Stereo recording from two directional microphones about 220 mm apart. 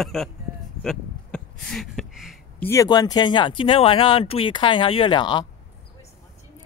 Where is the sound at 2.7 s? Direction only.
15° left (ahead or behind).